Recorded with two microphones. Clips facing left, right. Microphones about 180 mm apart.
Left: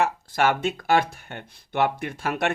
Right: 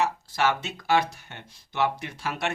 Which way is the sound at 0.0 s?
50° left (ahead or behind).